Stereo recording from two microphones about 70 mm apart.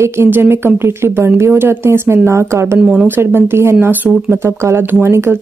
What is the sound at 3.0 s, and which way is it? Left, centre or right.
Speech, right.